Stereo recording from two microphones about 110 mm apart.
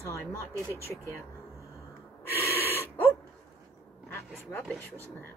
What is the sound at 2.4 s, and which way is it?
Gasp, 20° left (ahead or behind).